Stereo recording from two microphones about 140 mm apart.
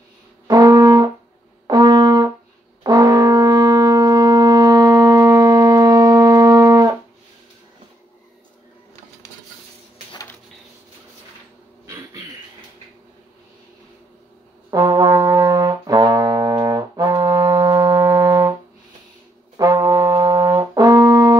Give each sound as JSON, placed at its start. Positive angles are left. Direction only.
{"t": 0.5, "sound": "brass instrument", "side_deg": -25}
{"t": 14.7, "sound": "brass instrument", "side_deg": -25}
{"t": 19.5, "sound": "brass instrument", "side_deg": -25}